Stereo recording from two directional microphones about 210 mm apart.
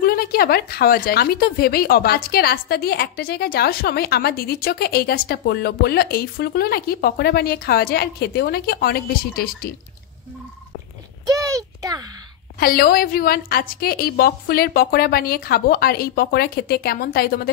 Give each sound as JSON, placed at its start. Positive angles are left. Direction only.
{"t": 0.0, "sound": "speech", "side_deg": 45}
{"t": 11.2, "sound": "speech", "side_deg": -15}
{"t": 12.5, "sound": "speech", "side_deg": 45}